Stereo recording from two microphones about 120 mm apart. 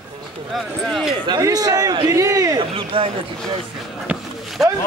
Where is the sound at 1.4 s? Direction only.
30° right (ahead or behind).